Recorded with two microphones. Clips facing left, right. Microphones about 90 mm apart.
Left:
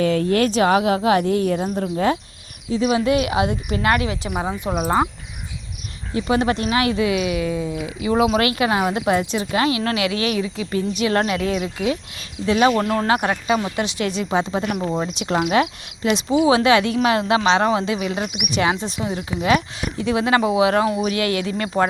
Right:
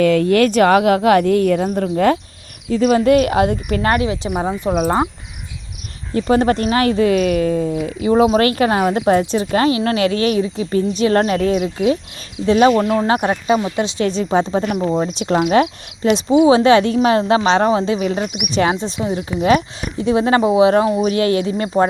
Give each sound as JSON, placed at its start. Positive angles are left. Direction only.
{"t": 0.0, "sound": "speech", "side_deg": -85}
{"t": 3.8, "sound": "speech", "side_deg": -30}
{"t": 6.1, "sound": "speech", "side_deg": -40}
{"t": 8.1, "sound": "speech", "side_deg": -30}